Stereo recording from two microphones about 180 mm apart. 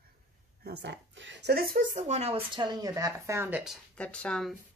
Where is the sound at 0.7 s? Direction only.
80° right.